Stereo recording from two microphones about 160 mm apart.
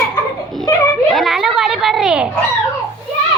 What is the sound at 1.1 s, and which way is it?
Children playing, centre (ahead or behind).